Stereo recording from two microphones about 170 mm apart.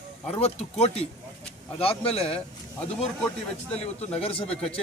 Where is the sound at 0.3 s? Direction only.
35° left (ahead or behind).